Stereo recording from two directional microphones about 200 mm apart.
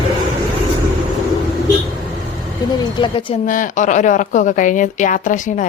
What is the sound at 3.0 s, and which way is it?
Speech, 25° left (ahead or behind).